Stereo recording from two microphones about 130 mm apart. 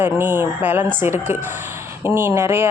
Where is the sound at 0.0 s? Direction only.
15° right (ahead or behind).